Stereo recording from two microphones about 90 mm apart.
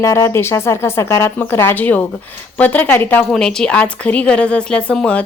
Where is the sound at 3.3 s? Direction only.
5° left (ahead or behind).